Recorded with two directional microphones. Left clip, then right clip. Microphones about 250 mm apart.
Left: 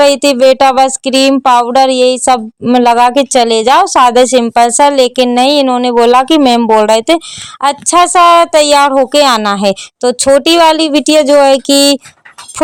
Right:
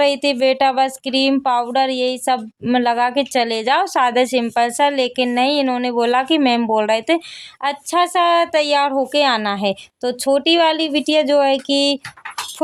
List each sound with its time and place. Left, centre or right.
0.0 s speech: left